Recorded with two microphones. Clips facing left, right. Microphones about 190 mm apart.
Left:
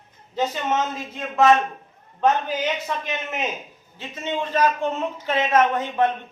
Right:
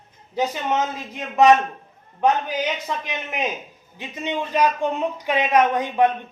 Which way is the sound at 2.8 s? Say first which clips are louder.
Left 1 dB; 15° right (ahead or behind).